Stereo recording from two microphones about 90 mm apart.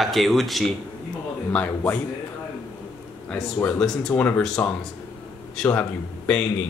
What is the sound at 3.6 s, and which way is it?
Speech, 5° left (ahead or behind).